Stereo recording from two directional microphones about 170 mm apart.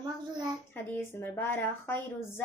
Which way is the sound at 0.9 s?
10° left (ahead or behind).